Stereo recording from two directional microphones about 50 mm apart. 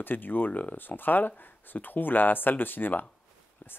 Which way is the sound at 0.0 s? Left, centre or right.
Left.